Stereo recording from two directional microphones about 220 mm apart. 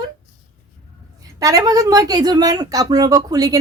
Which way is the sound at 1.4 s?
15° right (ahead or behind).